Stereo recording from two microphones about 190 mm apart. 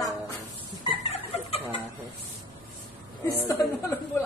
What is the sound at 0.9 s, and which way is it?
Chicken, 30° left (ahead or behind).